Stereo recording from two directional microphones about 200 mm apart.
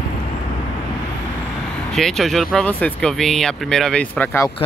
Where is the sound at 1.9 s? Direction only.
Centre (ahead or behind).